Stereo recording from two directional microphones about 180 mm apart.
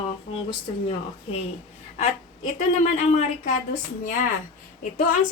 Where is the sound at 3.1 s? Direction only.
45° left (ahead or behind).